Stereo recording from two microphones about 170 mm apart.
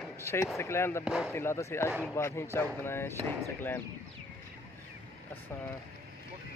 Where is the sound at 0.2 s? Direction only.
15° left (ahead or behind).